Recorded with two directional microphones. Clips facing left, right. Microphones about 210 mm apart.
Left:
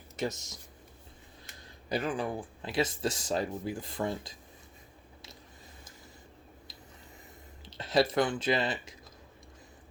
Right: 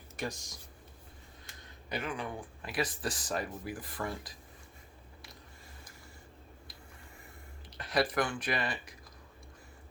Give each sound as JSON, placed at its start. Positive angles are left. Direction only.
{"t": 0.2, "sound": "speech", "side_deg": 25}
{"t": 1.9, "sound": "speech", "side_deg": 35}
{"t": 7.6, "sound": "speech", "side_deg": 25}